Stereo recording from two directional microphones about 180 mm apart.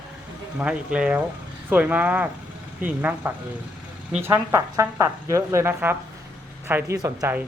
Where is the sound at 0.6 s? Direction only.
5° right (ahead or behind).